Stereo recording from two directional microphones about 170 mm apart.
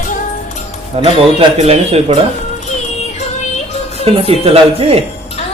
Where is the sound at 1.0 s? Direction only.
35° right (ahead or behind).